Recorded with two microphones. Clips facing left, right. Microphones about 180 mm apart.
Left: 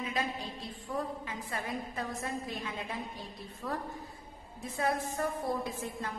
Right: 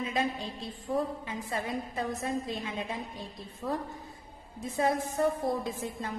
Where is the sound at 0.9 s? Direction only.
30° right (ahead or behind).